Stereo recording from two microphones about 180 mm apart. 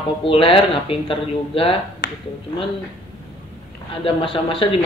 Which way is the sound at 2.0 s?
55° left (ahead or behind).